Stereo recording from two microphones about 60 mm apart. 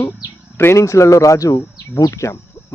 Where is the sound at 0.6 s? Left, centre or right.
Left.